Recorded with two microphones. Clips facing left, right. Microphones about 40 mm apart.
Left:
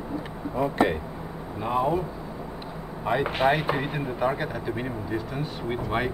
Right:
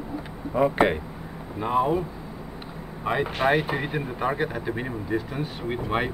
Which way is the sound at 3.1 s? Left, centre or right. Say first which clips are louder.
Even; centre.